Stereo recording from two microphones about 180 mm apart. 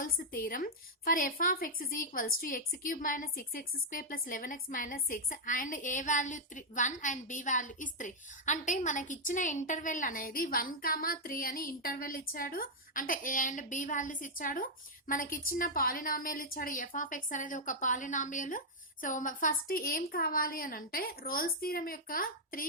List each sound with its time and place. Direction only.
0.0 s a woman's voice: 50° left (ahead or behind)